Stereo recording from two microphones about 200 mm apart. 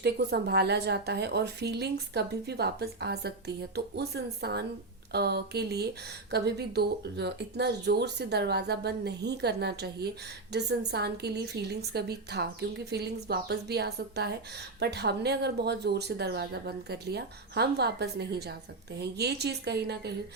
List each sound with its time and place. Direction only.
0.0 s a woman's voice: 55° right (ahead or behind)